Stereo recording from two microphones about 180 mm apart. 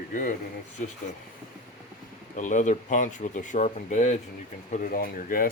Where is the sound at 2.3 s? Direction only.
45° left (ahead or behind).